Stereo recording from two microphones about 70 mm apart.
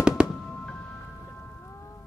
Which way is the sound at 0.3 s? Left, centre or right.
Centre.